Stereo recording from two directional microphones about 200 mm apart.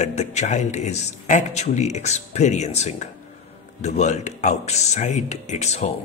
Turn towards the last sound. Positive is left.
turn(degrees=35)  # may be behind; listen again after turning